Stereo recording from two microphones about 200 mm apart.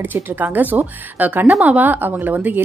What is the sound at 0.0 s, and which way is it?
A woman's voice, 10° right (ahead or behind).